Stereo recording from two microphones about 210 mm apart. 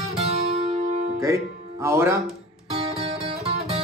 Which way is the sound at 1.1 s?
15° right (ahead or behind).